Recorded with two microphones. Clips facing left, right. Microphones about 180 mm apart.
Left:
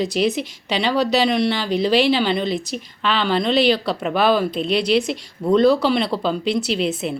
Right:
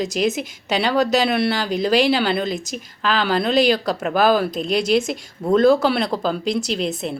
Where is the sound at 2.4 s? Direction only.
45° right (ahead or behind).